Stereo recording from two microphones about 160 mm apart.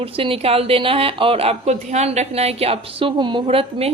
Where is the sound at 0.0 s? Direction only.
35° right (ahead or behind).